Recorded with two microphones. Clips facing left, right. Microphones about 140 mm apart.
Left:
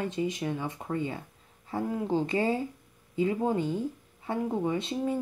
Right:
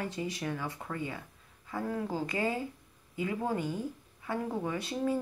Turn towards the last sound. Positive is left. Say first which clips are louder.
# left 3 dB
turn(degrees=25)  # may be behind; listen again after turning